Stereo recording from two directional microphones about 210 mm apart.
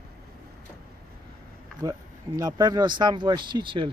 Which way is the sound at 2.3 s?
15° right (ahead or behind).